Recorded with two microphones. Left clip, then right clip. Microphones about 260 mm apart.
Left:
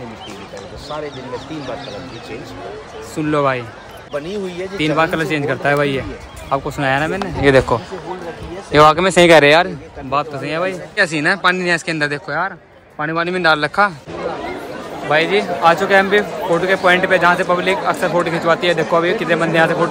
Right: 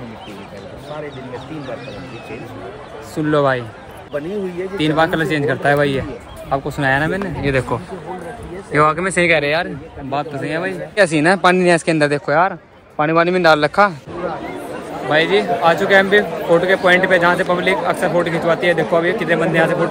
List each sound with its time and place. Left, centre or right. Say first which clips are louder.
3.3 s a man's voice: right 1 dB; centre
4.7 s a man's voice: even; centre
7.4 s speech: left 8 dB; left
8.7 s speech: left 5 dB; centre
9.3 s speech: left 9 dB; left
10.1 s a man's voice: left 2 dB; centre
15.0 s a man's voice: even; centre